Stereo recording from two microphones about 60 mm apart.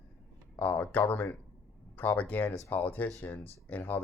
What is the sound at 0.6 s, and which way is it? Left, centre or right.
Speech, left.